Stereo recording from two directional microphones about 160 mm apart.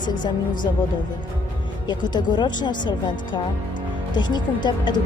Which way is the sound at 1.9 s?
25° left (ahead or behind).